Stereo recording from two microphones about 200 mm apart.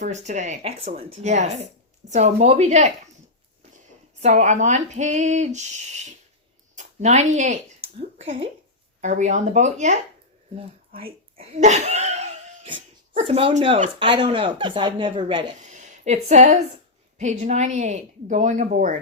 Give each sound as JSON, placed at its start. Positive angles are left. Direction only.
{"t": 0.0, "sound": "speech", "side_deg": -35}
{"t": 4.2, "sound": "a woman's voice", "side_deg": -35}
{"t": 9.0, "sound": "speech", "side_deg": -35}
{"t": 15.7, "sound": "a sound", "side_deg": -35}
{"t": 17.2, "sound": "speech", "side_deg": -35}